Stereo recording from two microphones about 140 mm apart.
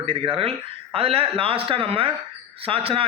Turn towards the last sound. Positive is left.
turn(degrees=-40)  # may be behind; listen again after turning